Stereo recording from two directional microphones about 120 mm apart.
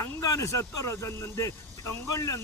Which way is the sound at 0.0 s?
25° left (ahead or behind).